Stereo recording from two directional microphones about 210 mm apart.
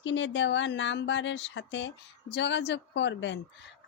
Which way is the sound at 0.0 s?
60° left (ahead or behind).